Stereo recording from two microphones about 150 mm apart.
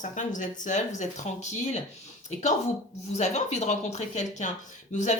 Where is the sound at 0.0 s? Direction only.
55° left (ahead or behind).